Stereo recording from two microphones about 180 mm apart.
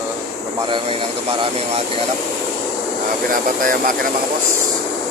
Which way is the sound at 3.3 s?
50° right (ahead or behind).